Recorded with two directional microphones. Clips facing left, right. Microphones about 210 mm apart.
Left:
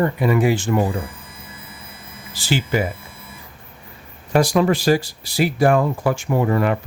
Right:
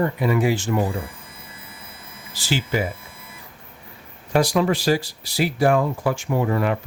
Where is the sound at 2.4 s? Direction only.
55° left (ahead or behind).